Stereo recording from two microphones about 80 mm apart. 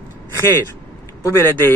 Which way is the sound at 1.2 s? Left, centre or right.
Left.